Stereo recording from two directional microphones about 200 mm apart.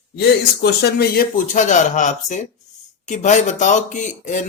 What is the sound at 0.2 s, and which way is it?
Speech, 55° left (ahead or behind).